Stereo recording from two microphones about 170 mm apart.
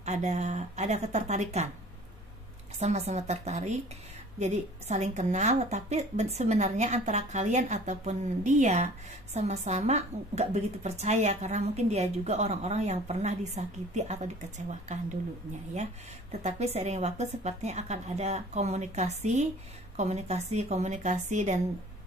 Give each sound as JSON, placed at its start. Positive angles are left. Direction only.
{"t": 0.0, "sound": "speech", "side_deg": -40}
{"t": 2.8, "sound": "a woman's voice", "side_deg": -40}